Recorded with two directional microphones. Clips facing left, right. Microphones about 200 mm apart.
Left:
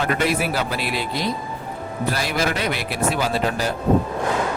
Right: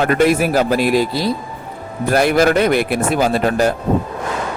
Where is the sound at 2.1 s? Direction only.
55° right (ahead or behind).